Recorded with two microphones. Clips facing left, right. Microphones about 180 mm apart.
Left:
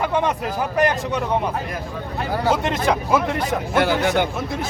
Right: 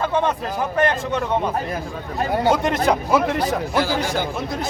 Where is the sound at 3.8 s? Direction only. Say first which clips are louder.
Left 5 dB; 65° left (ahead or behind).